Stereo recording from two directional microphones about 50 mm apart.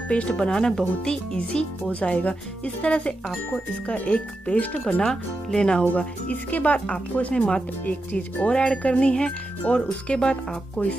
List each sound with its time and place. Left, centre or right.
0.4 s speech: centre
5.0 s speech: centre
5.9 s speech: left
7.3 s speech: centre
7.8 s speech: left
8.5 s speech: centre
10.3 s speech: left